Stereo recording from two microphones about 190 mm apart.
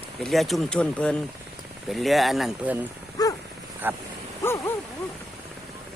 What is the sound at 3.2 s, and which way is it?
Dog, 20° left (ahead or behind).